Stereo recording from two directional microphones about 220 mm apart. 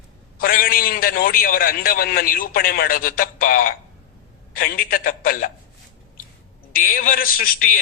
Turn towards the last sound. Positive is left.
turn(degrees=40)  # may be behind; listen again after turning